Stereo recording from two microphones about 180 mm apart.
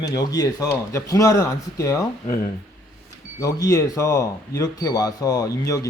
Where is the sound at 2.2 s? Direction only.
50° left (ahead or behind).